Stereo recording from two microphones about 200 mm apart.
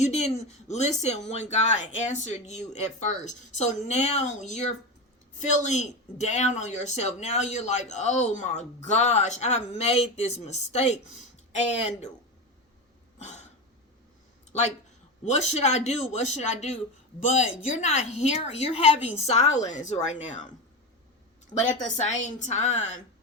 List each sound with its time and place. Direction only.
0.0 s speech: 35° left (ahead or behind)
13.1 s throat clearing: 35° left (ahead or behind)
15.2 s speech: 35° left (ahead or behind)
21.5 s speech: 35° left (ahead or behind)